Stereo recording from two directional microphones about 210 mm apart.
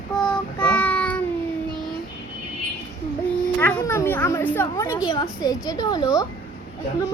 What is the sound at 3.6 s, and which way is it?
A woman's voice, 10° left (ahead or behind).